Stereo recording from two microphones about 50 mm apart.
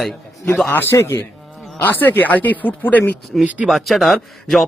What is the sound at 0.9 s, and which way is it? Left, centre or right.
Speech, left.